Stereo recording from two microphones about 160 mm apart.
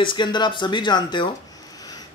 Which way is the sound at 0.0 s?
30° left (ahead or behind).